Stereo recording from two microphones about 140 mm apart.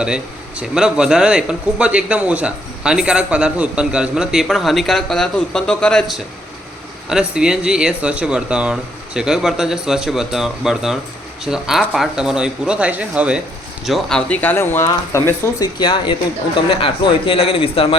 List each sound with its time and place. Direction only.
0.0 s speech: 5° right (ahead or behind); by 15.7 s 20° left (ahead or behind)
15.8 s a man's voice: 35° left (ahead or behind)